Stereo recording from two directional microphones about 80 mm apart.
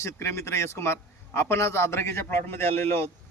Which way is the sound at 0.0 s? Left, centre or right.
Left.